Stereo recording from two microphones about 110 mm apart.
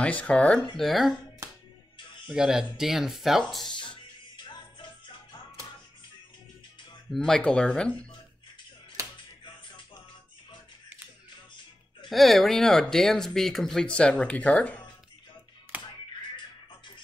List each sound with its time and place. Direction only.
0.0 s speech: 10° left (ahead or behind)
0.7 s speech: centre (ahead or behind)
2.2 s speech: 5° right (ahead or behind)
3.7 s music: 50° left (ahead or behind)
7.1 s speech: 5° left (ahead or behind)
12.1 s speech: centre (ahead or behind)
15.7 s music: 15° right (ahead or behind)